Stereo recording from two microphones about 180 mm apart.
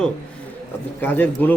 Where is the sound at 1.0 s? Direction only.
10° left (ahead or behind).